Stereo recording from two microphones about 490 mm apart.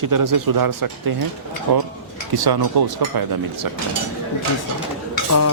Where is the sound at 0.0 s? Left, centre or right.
Right.